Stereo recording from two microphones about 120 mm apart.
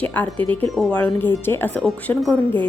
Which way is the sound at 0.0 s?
15° left (ahead or behind).